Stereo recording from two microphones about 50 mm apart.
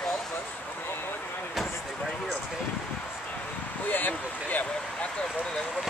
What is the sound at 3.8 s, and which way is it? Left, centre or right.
Speech, left.